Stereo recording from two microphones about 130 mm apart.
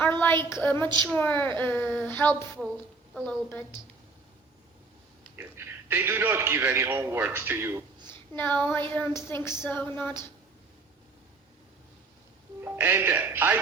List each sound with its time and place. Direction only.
0.0 s a woman's voice: 15° left (ahead or behind)
5.4 s a man's voice: 15° right (ahead or behind)
8.4 s a woman's voice: 15° left (ahead or behind)
12.6 s a man's voice: 20° right (ahead or behind)